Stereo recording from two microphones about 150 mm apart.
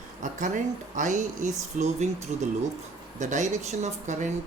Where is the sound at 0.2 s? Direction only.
55° right (ahead or behind).